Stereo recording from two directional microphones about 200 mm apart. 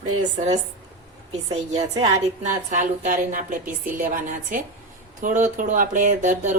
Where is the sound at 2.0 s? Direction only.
40° right (ahead or behind).